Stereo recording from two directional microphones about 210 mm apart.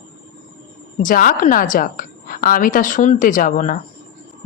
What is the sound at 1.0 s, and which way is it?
A woman's voice, 40° left (ahead or behind).